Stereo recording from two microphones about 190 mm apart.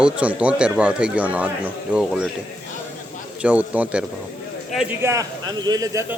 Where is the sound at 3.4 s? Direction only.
5° right (ahead or behind).